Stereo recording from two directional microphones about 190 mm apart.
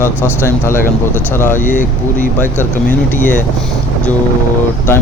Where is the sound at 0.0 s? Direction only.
15° left (ahead or behind).